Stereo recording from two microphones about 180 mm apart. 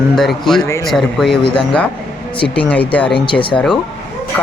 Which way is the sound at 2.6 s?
10° left (ahead or behind).